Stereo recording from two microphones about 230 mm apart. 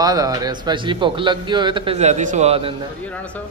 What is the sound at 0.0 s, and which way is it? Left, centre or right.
A man's voice, centre.